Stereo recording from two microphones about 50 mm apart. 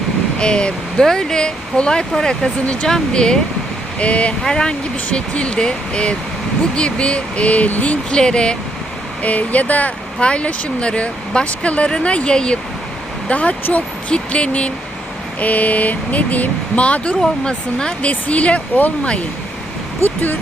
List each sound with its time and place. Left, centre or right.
0.3 s speech: centre
4.4 s speech: centre; by 7.9 s left
8.1 s speech: centre
9.2 s speech: left
17.2 s speech: centre
18.1 s speech: left